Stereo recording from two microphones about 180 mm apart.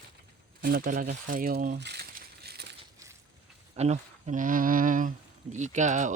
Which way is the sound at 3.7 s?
35° right (ahead or behind).